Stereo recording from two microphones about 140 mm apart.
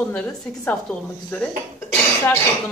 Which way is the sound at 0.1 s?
10° left (ahead or behind).